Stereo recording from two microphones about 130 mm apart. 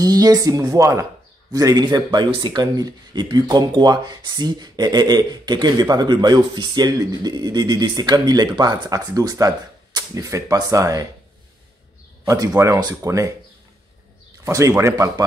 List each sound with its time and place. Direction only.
0.0 s speech: 30° right (ahead or behind)
12.3 s speech: 25° right (ahead or behind)
14.4 s speech: 20° right (ahead or behind)